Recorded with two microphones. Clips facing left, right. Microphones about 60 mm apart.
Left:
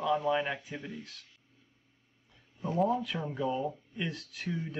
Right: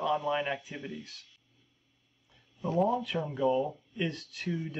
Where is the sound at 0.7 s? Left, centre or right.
Left.